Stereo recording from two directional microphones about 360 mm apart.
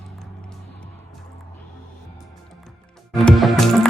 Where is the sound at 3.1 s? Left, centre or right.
Centre.